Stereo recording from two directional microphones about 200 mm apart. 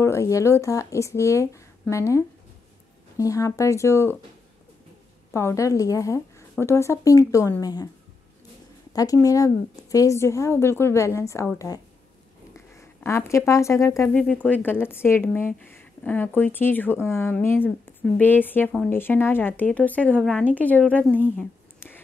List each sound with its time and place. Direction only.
0.0 s speech: 15° left (ahead or behind)
5.3 s speech: 15° left (ahead or behind)
8.9 s speech: 15° left (ahead or behind)
21.4 s a sound: 10° left (ahead or behind)